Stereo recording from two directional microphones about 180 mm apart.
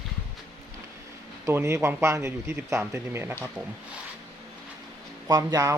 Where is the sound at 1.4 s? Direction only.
15° right (ahead or behind).